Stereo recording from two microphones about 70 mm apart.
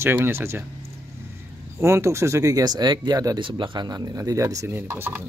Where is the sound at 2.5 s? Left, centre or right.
Right.